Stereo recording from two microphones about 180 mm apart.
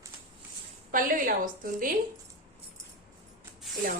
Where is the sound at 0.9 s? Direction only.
50° right (ahead or behind).